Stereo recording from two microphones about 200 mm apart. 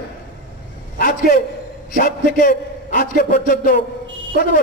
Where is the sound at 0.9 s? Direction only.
45° left (ahead or behind).